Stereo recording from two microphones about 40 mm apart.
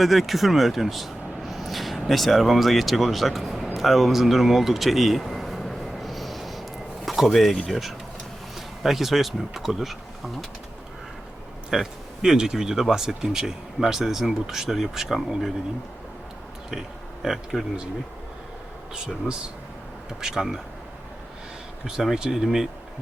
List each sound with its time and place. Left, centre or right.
0.0 s speech: centre
3.8 s a sound: centre
7.5 s speech: centre
11.7 s speech: centre
17.2 s speech: centre
18.9 s speech: centre
21.8 s speech: centre